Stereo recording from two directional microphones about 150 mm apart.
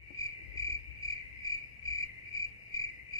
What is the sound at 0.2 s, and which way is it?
Cricket, 20° left (ahead or behind).